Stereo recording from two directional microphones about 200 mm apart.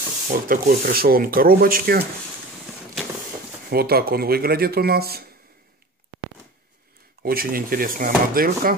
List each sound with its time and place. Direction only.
0.3 s speech: 45° right (ahead or behind)
3.7 s speech: 50° right (ahead or behind)
7.2 s speech: 45° right (ahead or behind)